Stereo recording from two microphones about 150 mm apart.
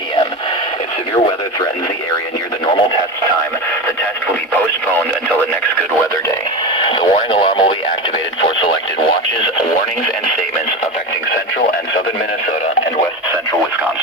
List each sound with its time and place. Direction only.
6.7 s radio: 30° left (ahead or behind)